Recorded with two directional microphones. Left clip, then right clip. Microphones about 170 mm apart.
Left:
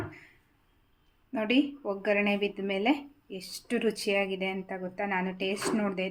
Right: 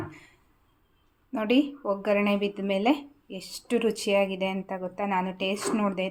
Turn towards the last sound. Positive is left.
turn(degrees=-15)  # may be behind; listen again after turning